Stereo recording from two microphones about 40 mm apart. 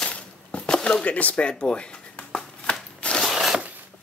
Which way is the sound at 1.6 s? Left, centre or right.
Left.